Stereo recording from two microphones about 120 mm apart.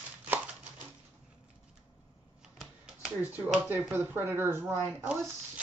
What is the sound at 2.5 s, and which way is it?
Finger snapping, 5° right (ahead or behind).